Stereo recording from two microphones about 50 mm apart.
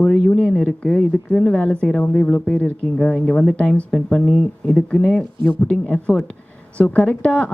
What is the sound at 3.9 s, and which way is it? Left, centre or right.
Speech, centre.